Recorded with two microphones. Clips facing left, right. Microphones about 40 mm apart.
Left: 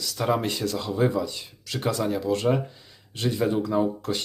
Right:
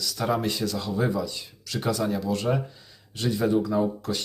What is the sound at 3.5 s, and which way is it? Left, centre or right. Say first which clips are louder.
Speech: even; centre.